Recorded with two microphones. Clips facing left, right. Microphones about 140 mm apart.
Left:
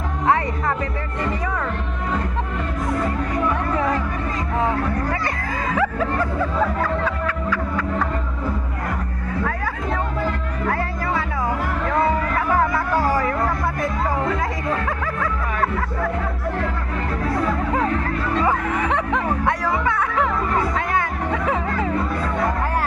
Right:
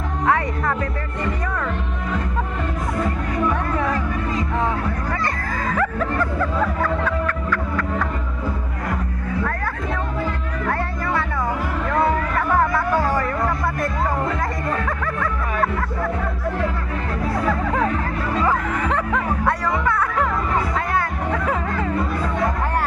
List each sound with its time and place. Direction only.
0.3 s music: 30° left (ahead or behind)
7.0 s music: 5° left (ahead or behind)
10.7 s music: centre (ahead or behind)
12.4 s music: 5° left (ahead or behind)
19.5 s music: centre (ahead or behind)